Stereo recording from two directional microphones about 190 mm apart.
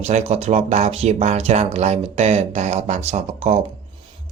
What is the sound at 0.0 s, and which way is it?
Speech, 35° right (ahead or behind).